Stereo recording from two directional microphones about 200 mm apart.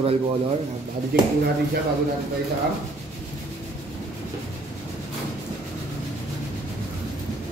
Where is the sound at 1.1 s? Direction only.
50° right (ahead or behind).